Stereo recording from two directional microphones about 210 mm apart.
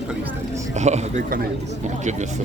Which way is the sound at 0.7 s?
30° right (ahead or behind).